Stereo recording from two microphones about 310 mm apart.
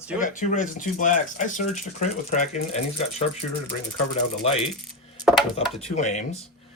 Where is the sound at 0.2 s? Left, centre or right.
Left.